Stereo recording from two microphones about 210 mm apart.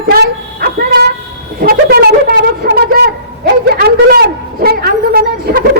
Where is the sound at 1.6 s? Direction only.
45° right (ahead or behind).